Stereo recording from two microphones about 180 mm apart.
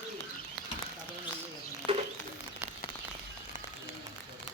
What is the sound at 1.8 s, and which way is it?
Bird, 5° left (ahead or behind).